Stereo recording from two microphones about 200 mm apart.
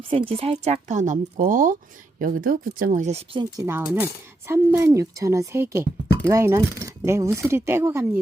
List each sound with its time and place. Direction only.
0.1 s speech: 25° right (ahead or behind)
3.6 s speech: 10° right (ahead or behind)